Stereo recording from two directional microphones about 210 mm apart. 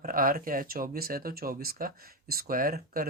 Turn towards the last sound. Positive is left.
turn(degrees=-45)  # may be behind; listen again after turning